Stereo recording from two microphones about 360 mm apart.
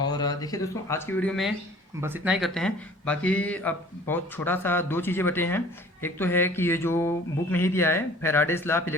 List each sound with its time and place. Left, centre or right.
0.1 s speech: centre